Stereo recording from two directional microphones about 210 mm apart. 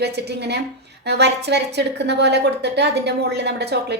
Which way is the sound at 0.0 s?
55° right (ahead or behind).